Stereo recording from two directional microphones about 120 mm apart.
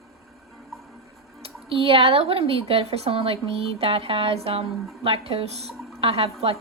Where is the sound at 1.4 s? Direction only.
50° right (ahead or behind).